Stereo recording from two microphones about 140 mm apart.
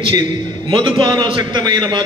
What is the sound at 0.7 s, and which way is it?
A man's voice, 35° right (ahead or behind).